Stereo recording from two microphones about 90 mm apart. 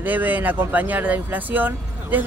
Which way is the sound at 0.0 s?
20° right (ahead or behind).